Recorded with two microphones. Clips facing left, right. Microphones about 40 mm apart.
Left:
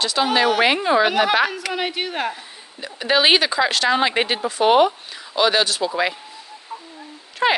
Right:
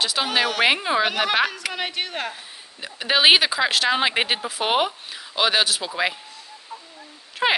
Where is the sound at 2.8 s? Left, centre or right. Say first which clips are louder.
Even; centre.